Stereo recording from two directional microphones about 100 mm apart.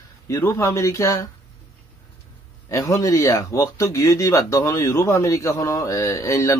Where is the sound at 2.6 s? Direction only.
35° left (ahead or behind).